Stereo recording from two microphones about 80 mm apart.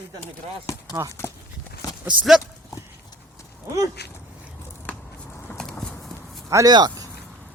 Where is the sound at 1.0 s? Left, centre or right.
Right.